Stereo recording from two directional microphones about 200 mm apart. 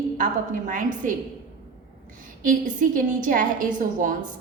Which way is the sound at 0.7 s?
40° right (ahead or behind).